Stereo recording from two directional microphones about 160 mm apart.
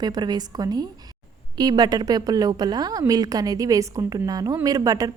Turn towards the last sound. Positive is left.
turn(degrees=-20)  # may be behind; listen again after turning